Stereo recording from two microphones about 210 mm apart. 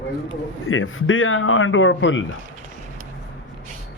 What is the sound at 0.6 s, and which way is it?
A man's voice, 75° left (ahead or behind).